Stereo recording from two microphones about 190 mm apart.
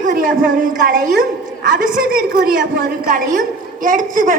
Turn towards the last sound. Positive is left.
turn(degrees=-45)  # may be behind; listen again after turning